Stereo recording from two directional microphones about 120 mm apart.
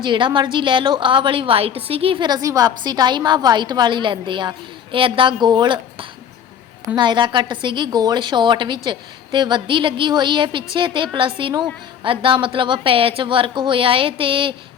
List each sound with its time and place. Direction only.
0.0 s a woman's voice: 40° right (ahead or behind)